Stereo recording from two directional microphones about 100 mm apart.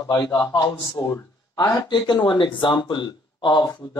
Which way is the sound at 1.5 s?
40° left (ahead or behind).